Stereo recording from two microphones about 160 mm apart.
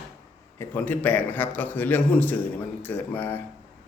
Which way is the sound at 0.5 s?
10° left (ahead or behind).